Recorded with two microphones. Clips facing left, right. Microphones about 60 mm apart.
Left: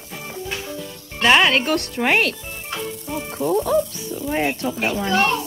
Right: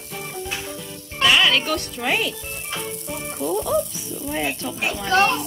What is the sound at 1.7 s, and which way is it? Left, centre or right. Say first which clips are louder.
Speech: left 4 dB; left.